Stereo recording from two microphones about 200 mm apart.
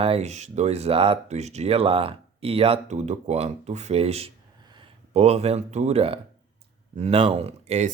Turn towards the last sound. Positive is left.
turn(degrees=-35)  # may be behind; listen again after turning